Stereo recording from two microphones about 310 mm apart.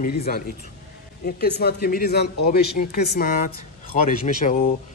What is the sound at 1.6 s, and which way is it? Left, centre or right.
Speech, left.